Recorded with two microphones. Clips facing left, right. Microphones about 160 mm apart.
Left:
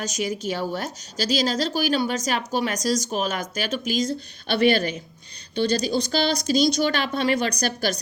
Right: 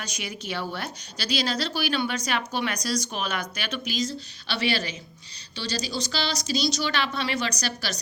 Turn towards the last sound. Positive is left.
turn(degrees=50)  # may be behind; listen again after turning